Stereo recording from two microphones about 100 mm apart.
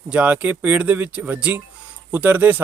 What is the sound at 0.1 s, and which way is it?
Speech, 15° right (ahead or behind).